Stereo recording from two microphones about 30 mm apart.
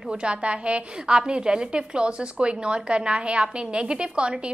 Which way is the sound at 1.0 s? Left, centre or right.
Right.